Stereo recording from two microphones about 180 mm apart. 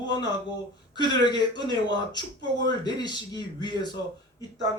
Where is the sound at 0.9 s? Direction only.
25° left (ahead or behind).